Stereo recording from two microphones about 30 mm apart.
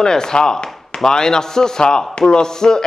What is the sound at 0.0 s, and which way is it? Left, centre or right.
A man's voice, left.